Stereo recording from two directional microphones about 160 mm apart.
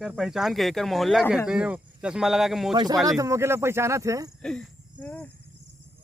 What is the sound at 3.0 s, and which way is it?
Speech, 20° right (ahead or behind).